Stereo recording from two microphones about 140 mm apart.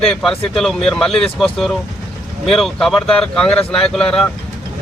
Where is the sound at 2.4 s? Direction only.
Centre (ahead or behind).